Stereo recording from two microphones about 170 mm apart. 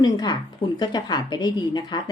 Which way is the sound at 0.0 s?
25° left (ahead or behind).